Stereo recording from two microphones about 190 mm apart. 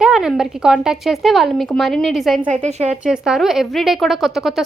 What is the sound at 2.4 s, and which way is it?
Speech, 40° right (ahead or behind).